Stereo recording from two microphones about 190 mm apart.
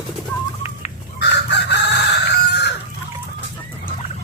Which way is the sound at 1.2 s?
65° left (ahead or behind).